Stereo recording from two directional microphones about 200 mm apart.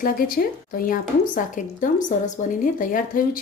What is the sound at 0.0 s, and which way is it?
Speech, 45° left (ahead or behind).